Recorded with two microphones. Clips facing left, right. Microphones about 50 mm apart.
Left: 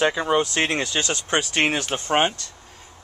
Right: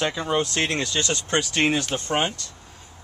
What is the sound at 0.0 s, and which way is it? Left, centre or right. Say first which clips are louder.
Speech: left 4 dB; centre.